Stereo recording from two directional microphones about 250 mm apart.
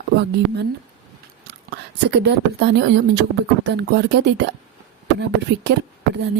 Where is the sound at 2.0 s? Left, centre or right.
Right.